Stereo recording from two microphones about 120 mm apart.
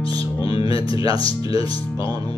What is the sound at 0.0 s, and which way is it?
Music, 50° left (ahead or behind).